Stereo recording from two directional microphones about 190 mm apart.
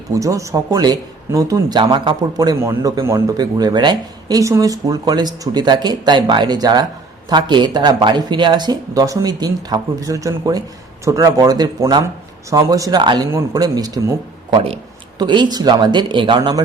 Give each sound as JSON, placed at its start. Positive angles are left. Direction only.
{"t": 0.1, "sound": "speech", "side_deg": -15}
{"t": 14.5, "sound": "speech", "side_deg": -30}